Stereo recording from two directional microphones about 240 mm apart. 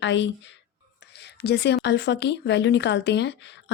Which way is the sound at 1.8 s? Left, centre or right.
Left.